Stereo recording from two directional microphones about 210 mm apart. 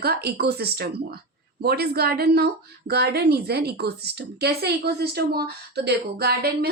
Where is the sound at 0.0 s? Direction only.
50° right (ahead or behind).